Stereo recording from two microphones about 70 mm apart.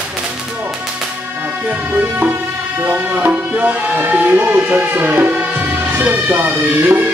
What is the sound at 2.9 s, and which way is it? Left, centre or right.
Music, right.